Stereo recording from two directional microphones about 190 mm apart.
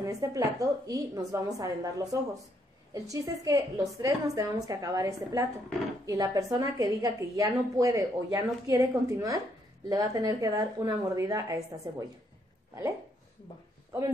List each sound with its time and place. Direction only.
0.0 s a woman's voice: 15° right (ahead or behind)